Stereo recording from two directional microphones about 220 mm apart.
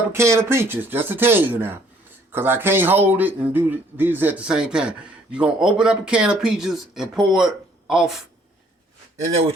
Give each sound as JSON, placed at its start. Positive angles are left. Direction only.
{"t": 0.1, "sound": "speech", "side_deg": -10}
{"t": 9.2, "sound": "speech", "side_deg": -30}